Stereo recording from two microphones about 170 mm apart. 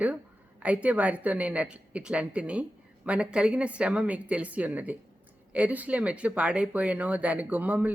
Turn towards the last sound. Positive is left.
turn(degrees=-10)  # may be behind; listen again after turning